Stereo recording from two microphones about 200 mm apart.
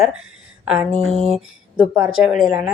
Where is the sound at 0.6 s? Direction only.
5° right (ahead or behind).